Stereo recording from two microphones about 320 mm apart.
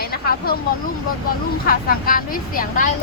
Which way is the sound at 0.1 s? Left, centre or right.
Left.